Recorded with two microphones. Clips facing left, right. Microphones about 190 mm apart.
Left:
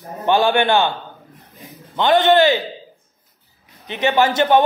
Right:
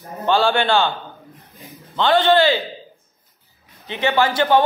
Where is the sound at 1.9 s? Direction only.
20° left (ahead or behind).